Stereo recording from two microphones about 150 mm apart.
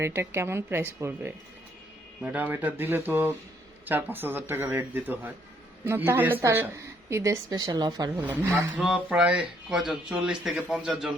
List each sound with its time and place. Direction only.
0.0 s a man's voice: 20° right (ahead or behind)
8.2 s a man's voice: 15° right (ahead or behind)